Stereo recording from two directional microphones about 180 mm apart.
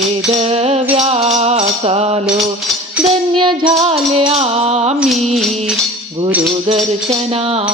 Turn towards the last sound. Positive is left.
turn(degrees=-5)  # may be behind; listen again after turning